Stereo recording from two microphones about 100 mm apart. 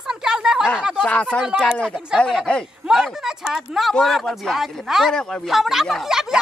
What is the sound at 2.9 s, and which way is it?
Speech, 5° right (ahead or behind).